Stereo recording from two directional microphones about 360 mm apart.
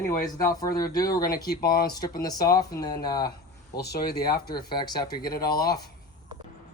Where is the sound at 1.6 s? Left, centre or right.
Left.